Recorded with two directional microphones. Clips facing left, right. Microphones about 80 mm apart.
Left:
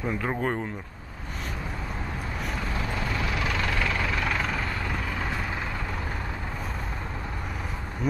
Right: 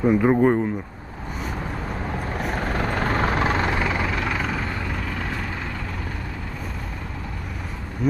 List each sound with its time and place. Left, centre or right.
0.0 s speech: centre
2.5 s vehicle: right
4.1 s vehicle: centre
8.0 s a sound: centre